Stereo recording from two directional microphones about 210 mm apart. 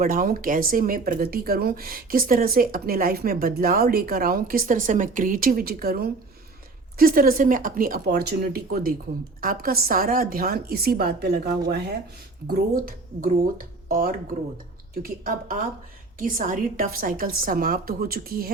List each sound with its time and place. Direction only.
0.0 s a woman's voice: 40° right (ahead or behind)